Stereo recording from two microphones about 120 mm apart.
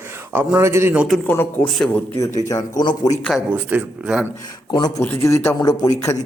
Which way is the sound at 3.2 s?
10° right (ahead or behind).